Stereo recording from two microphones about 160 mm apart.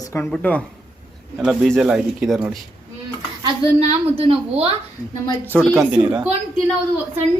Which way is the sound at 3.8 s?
40° right (ahead or behind).